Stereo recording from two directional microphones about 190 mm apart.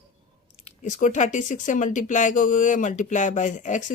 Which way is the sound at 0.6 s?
40° left (ahead or behind).